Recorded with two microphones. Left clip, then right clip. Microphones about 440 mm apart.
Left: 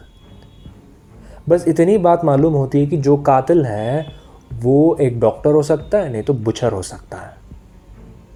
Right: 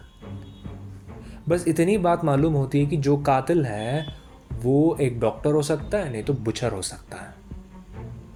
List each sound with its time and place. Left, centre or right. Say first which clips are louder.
1.5 s speech: left 8 dB; right